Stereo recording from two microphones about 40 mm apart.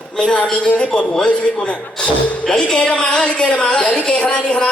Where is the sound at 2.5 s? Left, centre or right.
Centre.